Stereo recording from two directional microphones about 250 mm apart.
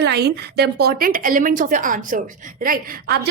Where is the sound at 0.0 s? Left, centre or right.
Right.